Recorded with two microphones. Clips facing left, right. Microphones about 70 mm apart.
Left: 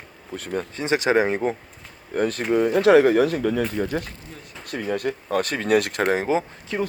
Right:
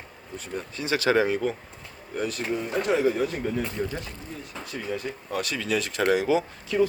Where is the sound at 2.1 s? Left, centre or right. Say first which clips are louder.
Left 8 dB; left.